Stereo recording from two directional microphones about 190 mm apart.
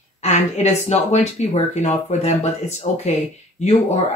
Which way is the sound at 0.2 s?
35° left (ahead or behind).